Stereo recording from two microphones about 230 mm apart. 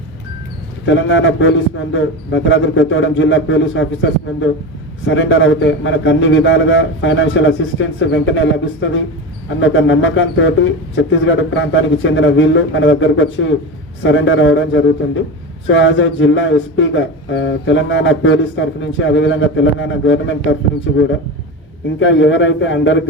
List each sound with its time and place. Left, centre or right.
0.9 s a man's voice: left
5.0 s a man's voice: left